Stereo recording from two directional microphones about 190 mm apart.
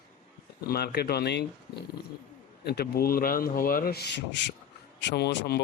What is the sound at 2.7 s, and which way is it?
Speech, 55° left (ahead or behind).